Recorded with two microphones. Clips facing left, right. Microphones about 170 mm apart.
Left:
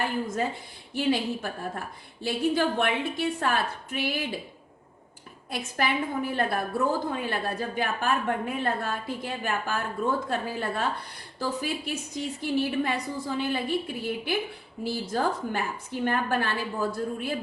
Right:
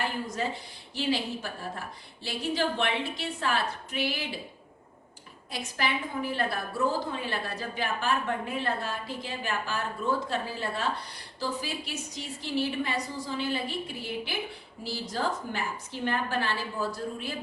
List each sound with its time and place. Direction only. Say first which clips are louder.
0.0 s a woman's voice: left 3 dB; 55° left (ahead or behind)
5.5 s a woman's voice: left 3 dB; 55° left (ahead or behind)